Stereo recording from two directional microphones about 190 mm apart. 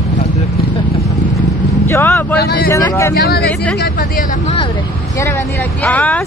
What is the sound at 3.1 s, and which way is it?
Speech, 55° left (ahead or behind).